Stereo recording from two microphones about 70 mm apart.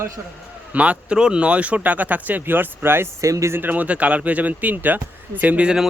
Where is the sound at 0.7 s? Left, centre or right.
Centre.